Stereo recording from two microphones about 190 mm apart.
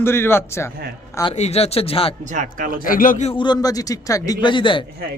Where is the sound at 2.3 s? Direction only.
45° right (ahead or behind).